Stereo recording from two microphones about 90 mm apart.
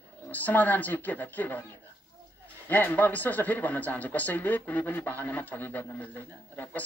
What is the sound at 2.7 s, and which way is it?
Speech, 20° left (ahead or behind).